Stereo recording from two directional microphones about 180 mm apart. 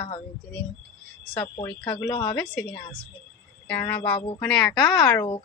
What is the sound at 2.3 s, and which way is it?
Speech, 5° left (ahead or behind).